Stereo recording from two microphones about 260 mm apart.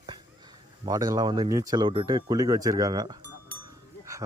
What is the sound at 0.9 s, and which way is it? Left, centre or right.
Speech, centre.